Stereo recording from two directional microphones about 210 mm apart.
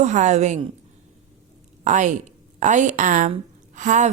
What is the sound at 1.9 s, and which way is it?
A woman's voice, 35° right (ahead or behind).